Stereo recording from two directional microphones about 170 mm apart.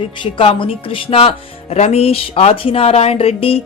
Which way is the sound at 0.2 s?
30° left (ahead or behind).